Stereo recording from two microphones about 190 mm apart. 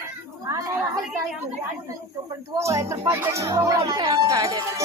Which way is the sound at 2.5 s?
15° right (ahead or behind).